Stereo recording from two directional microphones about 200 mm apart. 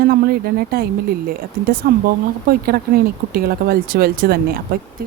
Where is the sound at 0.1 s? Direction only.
50° right (ahead or behind).